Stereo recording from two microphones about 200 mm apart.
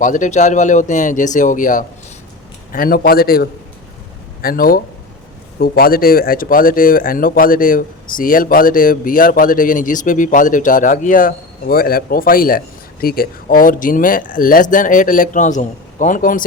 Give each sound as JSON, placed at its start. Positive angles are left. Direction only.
{"t": 0.0, "sound": "speech", "side_deg": 40}